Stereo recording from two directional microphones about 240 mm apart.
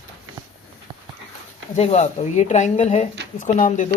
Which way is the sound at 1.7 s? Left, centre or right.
Left.